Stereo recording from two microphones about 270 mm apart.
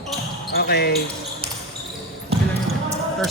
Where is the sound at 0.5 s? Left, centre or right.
Left.